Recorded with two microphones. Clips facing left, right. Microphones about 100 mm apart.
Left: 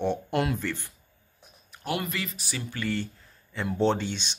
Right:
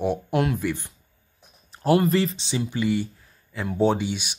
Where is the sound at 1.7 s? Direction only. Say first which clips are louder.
Right 12 dB; 35° right (ahead or behind).